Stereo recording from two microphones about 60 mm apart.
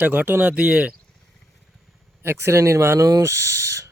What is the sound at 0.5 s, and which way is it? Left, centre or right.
Speech, right.